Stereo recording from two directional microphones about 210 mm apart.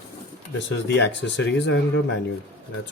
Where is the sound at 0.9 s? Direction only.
55° left (ahead or behind).